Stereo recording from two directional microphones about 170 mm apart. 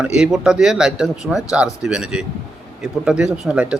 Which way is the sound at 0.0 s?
5° right (ahead or behind).